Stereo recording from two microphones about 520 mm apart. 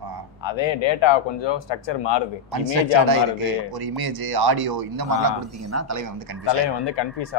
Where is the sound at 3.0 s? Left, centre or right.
Right.